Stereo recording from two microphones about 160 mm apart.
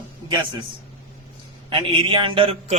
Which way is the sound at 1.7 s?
30° right (ahead or behind).